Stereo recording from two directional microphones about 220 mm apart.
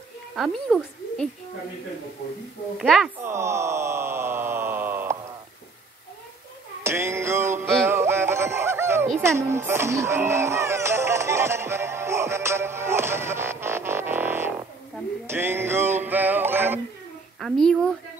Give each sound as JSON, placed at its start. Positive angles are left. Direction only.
{"t": 0.4, "sound": "a woman's voice", "side_deg": 0}
{"t": 2.8, "sound": "a woman's voice", "side_deg": 0}
{"t": 3.2, "sound": "a sound", "side_deg": -10}
{"t": 6.8, "sound": "music", "side_deg": -10}
{"t": 17.4, "sound": "a woman's voice", "side_deg": 0}